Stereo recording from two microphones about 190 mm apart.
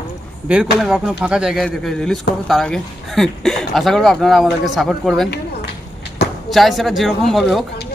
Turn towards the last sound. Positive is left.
turn(degrees=0)  # may be behind; listen again after turning